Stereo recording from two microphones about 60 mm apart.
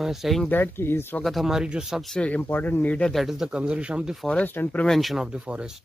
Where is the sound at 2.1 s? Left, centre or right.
Left.